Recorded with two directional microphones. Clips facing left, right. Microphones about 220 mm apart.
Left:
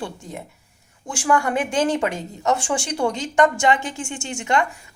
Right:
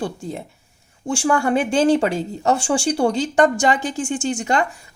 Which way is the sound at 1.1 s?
30° right (ahead or behind).